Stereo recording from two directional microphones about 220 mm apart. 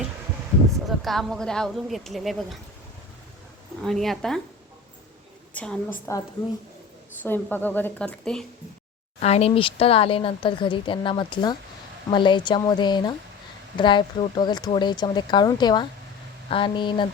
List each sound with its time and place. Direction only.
0.9 s speech: centre (ahead or behind)
3.8 s speech: centre (ahead or behind)
5.5 s a woman's voice: 5° left (ahead or behind)
9.2 s speech: 30° left (ahead or behind)